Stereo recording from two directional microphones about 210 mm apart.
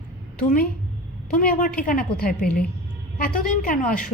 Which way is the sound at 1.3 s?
40° left (ahead or behind).